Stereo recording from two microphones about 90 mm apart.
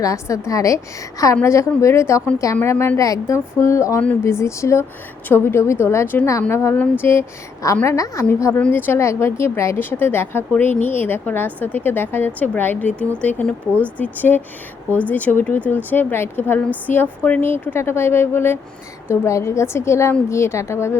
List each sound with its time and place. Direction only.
0.0 s a woman's voice: 35° left (ahead or behind)
8.5 s a woman's voice: 20° left (ahead or behind)